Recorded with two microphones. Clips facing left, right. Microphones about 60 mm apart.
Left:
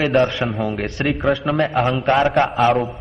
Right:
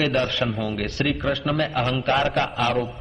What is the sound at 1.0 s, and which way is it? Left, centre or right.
A man's voice, centre.